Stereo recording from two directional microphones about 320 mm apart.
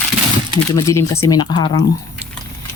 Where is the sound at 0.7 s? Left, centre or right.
Centre.